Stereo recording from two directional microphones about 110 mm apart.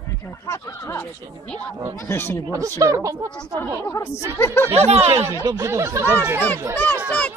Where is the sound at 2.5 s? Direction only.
30° right (ahead or behind).